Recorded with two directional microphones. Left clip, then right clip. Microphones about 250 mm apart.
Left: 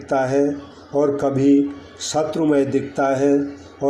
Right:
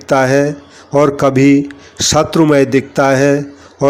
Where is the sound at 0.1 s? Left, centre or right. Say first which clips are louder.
Right 7 dB; right.